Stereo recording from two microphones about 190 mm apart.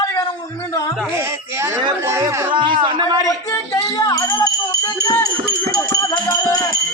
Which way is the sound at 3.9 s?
20° left (ahead or behind).